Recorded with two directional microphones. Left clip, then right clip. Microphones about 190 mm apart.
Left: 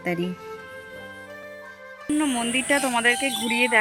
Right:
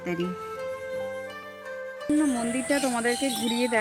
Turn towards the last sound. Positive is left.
turn(degrees=-10)  # may be behind; listen again after turning